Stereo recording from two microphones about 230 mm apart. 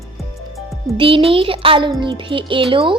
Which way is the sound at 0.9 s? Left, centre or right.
Right.